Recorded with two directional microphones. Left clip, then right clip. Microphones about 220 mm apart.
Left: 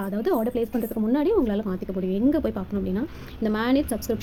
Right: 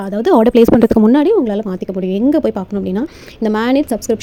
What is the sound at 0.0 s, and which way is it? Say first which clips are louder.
Speech: right 13 dB; 30° right (ahead or behind).